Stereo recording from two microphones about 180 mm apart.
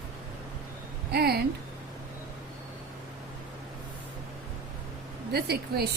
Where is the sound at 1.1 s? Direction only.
60° right (ahead or behind).